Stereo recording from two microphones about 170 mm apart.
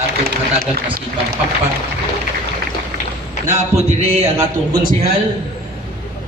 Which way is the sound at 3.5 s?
40° right (ahead or behind).